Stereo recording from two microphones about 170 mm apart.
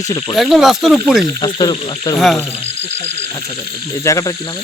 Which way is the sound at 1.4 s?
25° left (ahead or behind).